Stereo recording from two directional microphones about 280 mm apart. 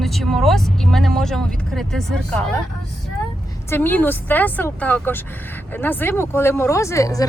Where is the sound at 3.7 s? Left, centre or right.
Centre.